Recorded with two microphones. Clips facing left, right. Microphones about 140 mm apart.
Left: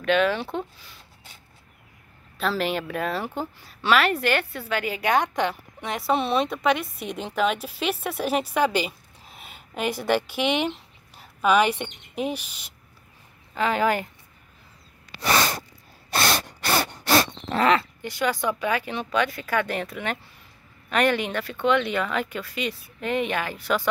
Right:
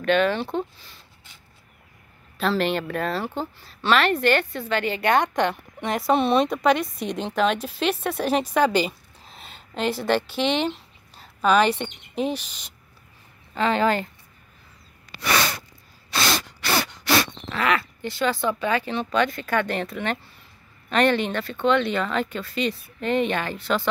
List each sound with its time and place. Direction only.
0.0 s speech: 5° left (ahead or behind)
2.3 s a woman's voice: 5° left (ahead or behind)
16.1 s spray: 55° left (ahead or behind)
16.8 s a sound: 35° left (ahead or behind)
18.0 s a woman's voice: 15° left (ahead or behind)